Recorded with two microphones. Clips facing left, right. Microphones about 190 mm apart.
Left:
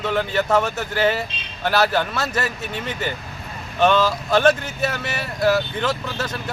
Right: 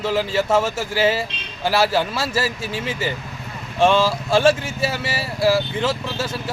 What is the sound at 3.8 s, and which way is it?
Speech, 25° right (ahead or behind).